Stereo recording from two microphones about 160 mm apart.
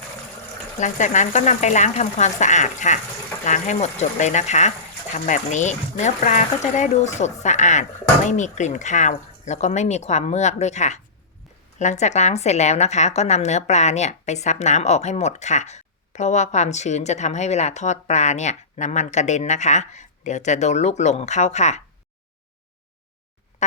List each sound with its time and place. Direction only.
0.8 s a woman's voice: 50° left (ahead or behind)